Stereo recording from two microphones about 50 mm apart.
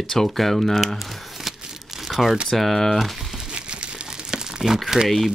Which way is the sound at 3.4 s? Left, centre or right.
Centre.